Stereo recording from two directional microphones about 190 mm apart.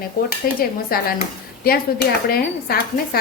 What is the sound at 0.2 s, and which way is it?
Speech, 50° left (ahead or behind).